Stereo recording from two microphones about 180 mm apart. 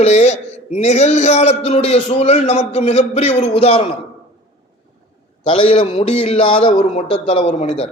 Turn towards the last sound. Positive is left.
turn(degrees=35)  # may be behind; listen again after turning